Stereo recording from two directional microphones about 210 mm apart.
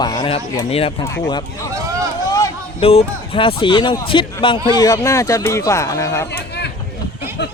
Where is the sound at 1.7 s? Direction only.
15° right (ahead or behind).